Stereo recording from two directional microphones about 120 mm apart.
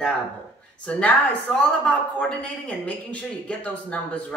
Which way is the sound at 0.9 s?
10° left (ahead or behind).